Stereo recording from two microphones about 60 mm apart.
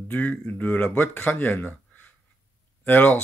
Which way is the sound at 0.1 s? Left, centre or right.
Left.